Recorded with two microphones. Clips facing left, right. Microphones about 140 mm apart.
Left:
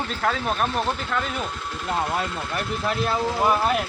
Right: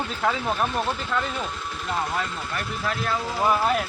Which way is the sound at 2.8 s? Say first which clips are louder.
Left 3 dB; 20° left (ahead or behind).